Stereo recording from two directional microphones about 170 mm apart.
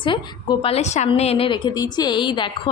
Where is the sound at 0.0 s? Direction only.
30° left (ahead or behind).